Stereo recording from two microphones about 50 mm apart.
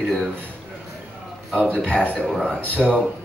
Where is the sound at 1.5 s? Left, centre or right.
Centre.